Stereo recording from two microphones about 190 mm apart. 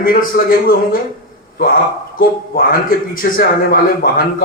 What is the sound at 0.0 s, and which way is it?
Speech, 50° left (ahead or behind).